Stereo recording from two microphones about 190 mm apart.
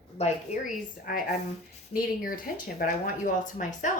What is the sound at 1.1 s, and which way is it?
A woman's voice, 50° left (ahead or behind).